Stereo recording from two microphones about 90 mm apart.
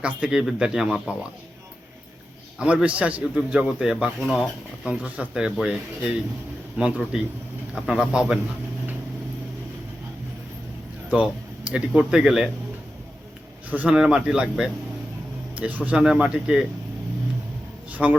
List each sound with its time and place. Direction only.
0.0 s a man's voice: 10° right (ahead or behind)
2.6 s a man's voice: 15° right (ahead or behind)
4.3 s speech: centre (ahead or behind)
4.9 s a man's voice: 15° right (ahead or behind)
11.1 s speech: 15° right (ahead or behind)
13.7 s a man's voice: 15° right (ahead or behind)
18.0 s a man's voice: 15° right (ahead or behind)